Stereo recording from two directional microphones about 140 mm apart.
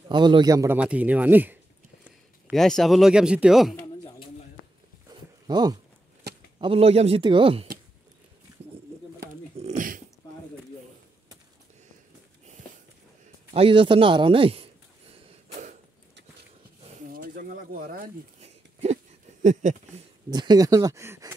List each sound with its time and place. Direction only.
0.1 s a man's voice: 35° right (ahead or behind)
0.7 s speech: 10° right (ahead or behind)
2.5 s speech: centre (ahead or behind)
5.1 s a sound: 30° right (ahead or behind)
6.6 s a man's voice: 45° right (ahead or behind)
9.6 s a sound: 60° right (ahead or behind)
13.5 s a man's voice: 40° right (ahead or behind)
15.5 s a sound: 60° right (ahead or behind)
17.1 s pigeon: 85° right
18.4 s a sound: 50° right (ahead or behind)
19.4 s speech: 60° right (ahead or behind)
20.2 s speech: 30° right (ahead or behind)